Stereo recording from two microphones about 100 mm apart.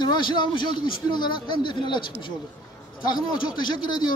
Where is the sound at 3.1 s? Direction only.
50° left (ahead or behind).